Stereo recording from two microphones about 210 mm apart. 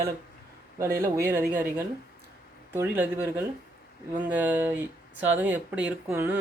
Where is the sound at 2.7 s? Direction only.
10° right (ahead or behind).